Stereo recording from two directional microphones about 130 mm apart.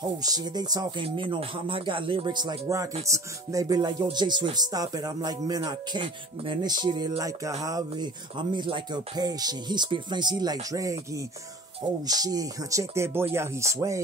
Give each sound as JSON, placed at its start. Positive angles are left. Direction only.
{"t": 0.2, "sound": "speech", "side_deg": -30}